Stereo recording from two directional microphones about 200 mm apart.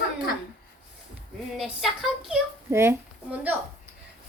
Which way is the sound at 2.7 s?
10° right (ahead or behind).